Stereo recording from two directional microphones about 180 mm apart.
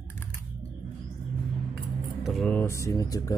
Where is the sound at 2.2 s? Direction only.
Centre (ahead or behind).